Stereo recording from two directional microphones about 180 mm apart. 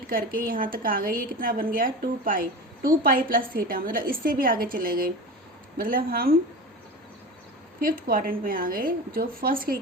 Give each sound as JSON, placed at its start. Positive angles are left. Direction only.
{"t": 0.1, "sound": "a woman's voice", "side_deg": -55}
{"t": 7.8, "sound": "a woman's voice", "side_deg": -55}